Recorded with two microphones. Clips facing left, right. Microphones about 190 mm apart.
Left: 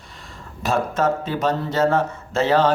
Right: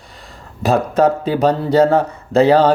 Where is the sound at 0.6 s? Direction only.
35° right (ahead or behind).